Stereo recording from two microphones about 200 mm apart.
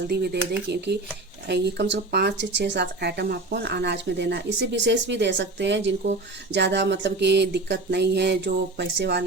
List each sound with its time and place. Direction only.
0.1 s speech: 55° right (ahead or behind)